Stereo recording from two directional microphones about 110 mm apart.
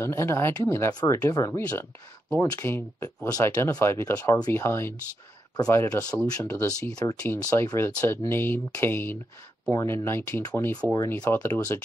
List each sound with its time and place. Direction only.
0.0 s speech: 25° left (ahead or behind)
1.7 s speech: 15° left (ahead or behind)
7.0 s speech: 30° left (ahead or behind)